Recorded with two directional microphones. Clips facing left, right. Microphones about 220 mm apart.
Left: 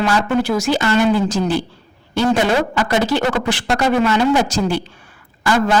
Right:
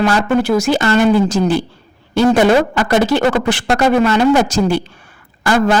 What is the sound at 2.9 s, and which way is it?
A man's voice, 50° right (ahead or behind).